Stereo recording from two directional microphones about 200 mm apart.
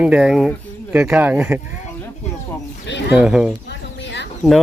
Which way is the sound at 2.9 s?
60° left (ahead or behind).